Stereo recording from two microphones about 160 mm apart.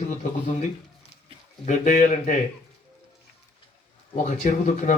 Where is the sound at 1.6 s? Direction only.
50° left (ahead or behind).